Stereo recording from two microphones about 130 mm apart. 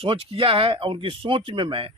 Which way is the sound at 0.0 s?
45° right (ahead or behind).